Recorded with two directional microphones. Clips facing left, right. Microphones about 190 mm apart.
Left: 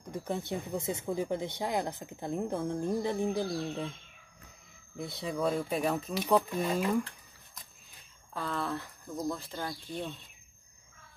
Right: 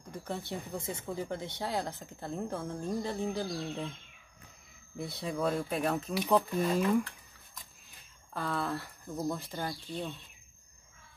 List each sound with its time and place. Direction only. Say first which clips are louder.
0.2 s speech: left 3 dB; 20° left (ahead or behind)
4.9 s speech: even; centre (ahead or behind)
8.3 s speech: right 1 dB; 5° right (ahead or behind)